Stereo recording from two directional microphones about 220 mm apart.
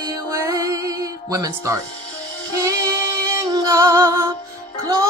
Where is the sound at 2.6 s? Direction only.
15° right (ahead or behind).